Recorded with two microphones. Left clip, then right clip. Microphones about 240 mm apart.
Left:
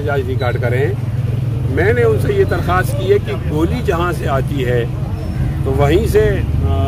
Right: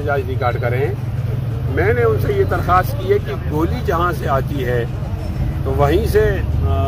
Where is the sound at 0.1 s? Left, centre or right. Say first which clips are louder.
Even; centre.